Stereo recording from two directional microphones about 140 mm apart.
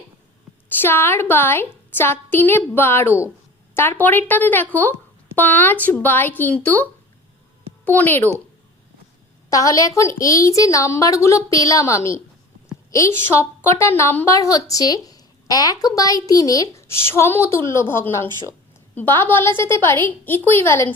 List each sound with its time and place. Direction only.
0.8 s a woman's voice: 15° left (ahead or behind)
7.9 s a woman's voice: 15° left (ahead or behind)
9.5 s a woman's voice: 25° left (ahead or behind)